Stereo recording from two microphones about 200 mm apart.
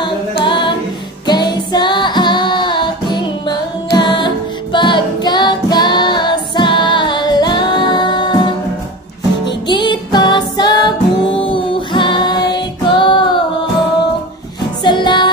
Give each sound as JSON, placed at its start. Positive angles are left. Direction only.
{"t": 0.0, "sound": "a capella", "side_deg": 25}
{"t": 1.2, "sound": "music", "side_deg": 20}
{"t": 4.7, "sound": "child singing", "side_deg": 25}
{"t": 9.7, "sound": "music", "side_deg": 20}
{"t": 14.8, "sound": "music", "side_deg": 25}